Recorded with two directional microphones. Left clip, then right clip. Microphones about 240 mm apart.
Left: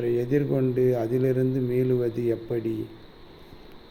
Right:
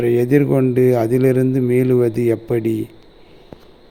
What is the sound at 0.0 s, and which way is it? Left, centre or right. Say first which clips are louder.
A man's voice: right 10 dB; right.